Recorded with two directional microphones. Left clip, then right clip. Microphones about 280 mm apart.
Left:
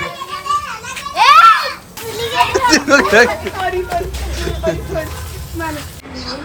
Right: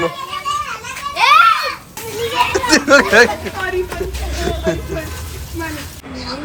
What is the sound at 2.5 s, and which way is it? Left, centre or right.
Speech, centre.